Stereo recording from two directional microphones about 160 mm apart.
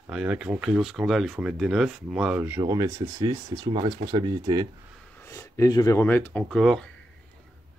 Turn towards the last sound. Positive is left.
turn(degrees=0)  # may be behind; listen again after turning